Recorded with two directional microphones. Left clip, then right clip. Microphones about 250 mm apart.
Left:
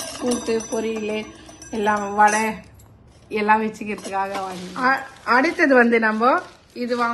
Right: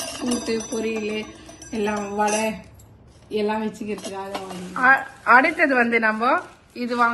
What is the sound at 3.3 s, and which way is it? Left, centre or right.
Speech, centre.